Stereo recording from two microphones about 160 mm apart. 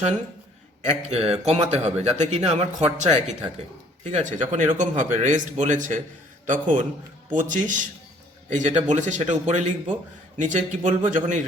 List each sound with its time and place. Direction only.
0.9 s a man's voice: 40° right (ahead or behind)